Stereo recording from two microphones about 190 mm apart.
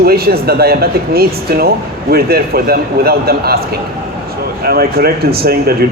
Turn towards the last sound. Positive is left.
turn(degrees=-55)  # may be behind; listen again after turning